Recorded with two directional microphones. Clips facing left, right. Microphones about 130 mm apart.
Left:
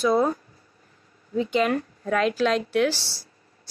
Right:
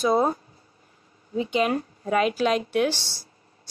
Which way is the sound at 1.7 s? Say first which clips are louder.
Even; 20° right (ahead or behind).